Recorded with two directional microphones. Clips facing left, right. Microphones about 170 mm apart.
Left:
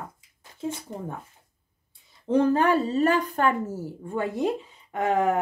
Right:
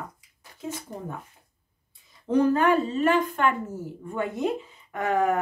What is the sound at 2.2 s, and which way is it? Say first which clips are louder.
A woman's voice: even; 30° left (ahead or behind).